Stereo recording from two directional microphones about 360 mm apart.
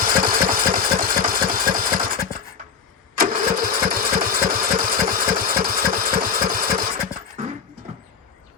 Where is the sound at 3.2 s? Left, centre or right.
Right.